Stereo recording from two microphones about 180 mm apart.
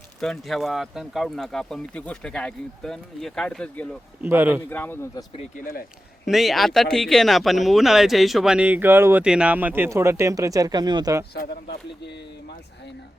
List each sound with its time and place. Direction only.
0.2 s speech: centre (ahead or behind)
4.2 s speech: 10° right (ahead or behind)
4.7 s a man's voice: 10° left (ahead or behind)
6.2 s speech: centre (ahead or behind); by 11.3 s 20° right (ahead or behind)
11.3 s speech: 65° left (ahead or behind)